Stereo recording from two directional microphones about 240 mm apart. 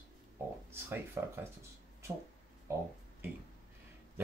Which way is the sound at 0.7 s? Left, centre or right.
Centre.